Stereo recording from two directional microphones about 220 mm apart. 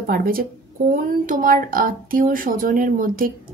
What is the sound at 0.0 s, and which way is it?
A woman's voice, 40° right (ahead or behind).